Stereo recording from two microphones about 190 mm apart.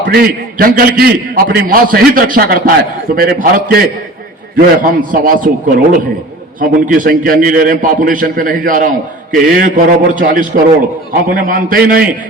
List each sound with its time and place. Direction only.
0.0 s a man's voice: 50° right (ahead or behind)
6.6 s a man's voice: 45° right (ahead or behind)